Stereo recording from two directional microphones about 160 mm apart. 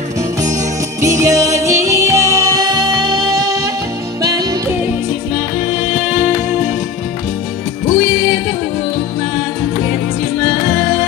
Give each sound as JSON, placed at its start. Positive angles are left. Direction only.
{"t": 1.0, "sound": "music", "side_deg": -20}
{"t": 5.7, "sound": "music", "side_deg": -15}